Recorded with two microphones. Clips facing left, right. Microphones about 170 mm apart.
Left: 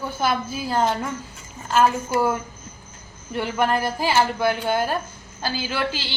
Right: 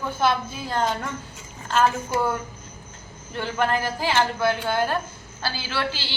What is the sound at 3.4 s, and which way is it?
Speech, 10° left (ahead or behind).